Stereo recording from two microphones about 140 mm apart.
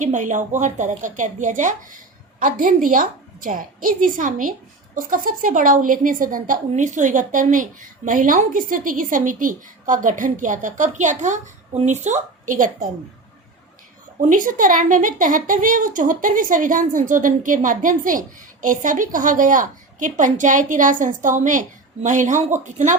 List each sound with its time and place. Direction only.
0.0 s a woman's voice: 60° right (ahead or behind)
2.4 s a woman's voice: 80° right
14.2 s a woman's voice: 70° right (ahead or behind)